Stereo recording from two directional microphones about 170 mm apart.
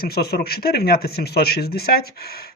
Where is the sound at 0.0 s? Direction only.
65° left (ahead or behind).